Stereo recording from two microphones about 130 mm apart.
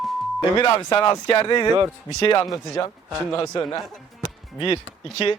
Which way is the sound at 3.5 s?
30° left (ahead or behind).